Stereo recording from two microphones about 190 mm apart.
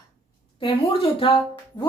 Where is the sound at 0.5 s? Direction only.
30° left (ahead or behind).